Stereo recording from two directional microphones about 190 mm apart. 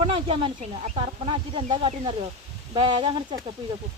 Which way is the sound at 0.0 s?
30° right (ahead or behind).